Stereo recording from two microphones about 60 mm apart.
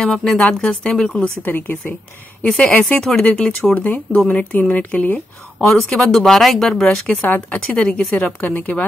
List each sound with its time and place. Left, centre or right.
0.0 s speech: centre
1.4 s speech: left
2.4 s a woman's voice: left
3.7 s a woman's voice: left
5.7 s speech: centre
7.1 s a woman's voice: left